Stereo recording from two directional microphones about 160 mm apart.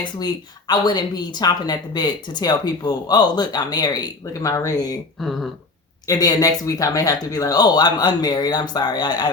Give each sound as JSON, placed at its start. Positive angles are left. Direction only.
{"t": 0.7, "sound": "speech", "side_deg": 25}
{"t": 5.2, "sound": "speech", "side_deg": 0}
{"t": 6.1, "sound": "speech", "side_deg": 20}